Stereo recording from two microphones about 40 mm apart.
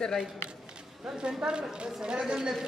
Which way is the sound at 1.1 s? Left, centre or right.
Right.